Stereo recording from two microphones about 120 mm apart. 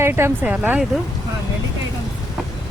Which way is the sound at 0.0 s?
20° right (ahead or behind).